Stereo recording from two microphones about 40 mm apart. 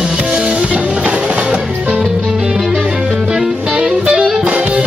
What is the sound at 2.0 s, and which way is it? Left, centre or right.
Music, centre.